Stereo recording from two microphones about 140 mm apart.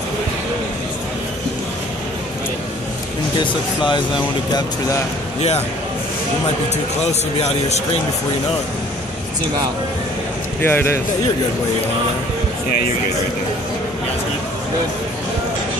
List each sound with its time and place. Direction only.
4.6 s speech: 25° left (ahead or behind)
7.1 s speech: 50° left (ahead or behind)
10.6 s speech: 15° left (ahead or behind)